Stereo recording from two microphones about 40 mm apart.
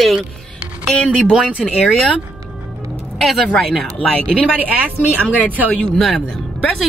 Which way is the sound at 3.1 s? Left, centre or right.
Centre.